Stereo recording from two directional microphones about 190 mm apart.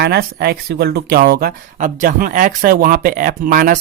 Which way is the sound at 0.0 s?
55° right (ahead or behind).